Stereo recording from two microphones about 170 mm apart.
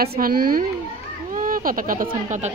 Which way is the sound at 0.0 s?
65° right (ahead or behind).